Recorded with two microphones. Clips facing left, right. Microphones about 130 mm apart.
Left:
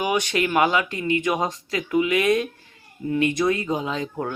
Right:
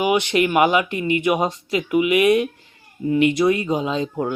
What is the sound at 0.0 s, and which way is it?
Speech, 15° right (ahead or behind).